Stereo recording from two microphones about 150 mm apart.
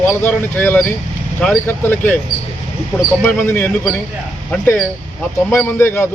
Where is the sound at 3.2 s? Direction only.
10° left (ahead or behind).